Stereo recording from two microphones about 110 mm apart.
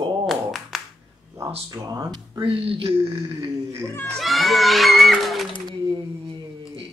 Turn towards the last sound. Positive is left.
turn(degrees=-40)  # may be behind; listen again after turning